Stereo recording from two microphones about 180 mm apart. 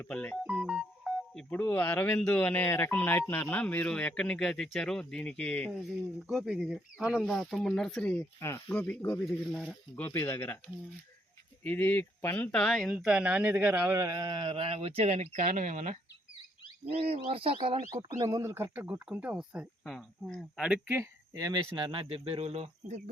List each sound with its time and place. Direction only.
0.0 s speech: 5° left (ahead or behind)
6.2 s speech: 5° right (ahead or behind); by 10.6 s 15° left (ahead or behind)
11.6 s speech: 10° left (ahead or behind)
20.7 s speech: 10° right (ahead or behind); by 23.0 s 35° right (ahead or behind)